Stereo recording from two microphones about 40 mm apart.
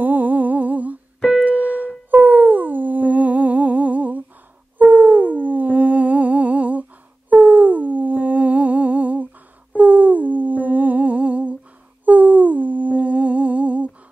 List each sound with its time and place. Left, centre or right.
0.0 s humming: right
1.4 s keyboard: right
2.0 s humming: right
4.7 s a sound: right
5.4 s humming: right
12.0 s humming: right